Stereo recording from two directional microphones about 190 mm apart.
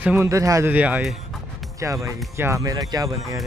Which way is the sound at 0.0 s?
10° right (ahead or behind).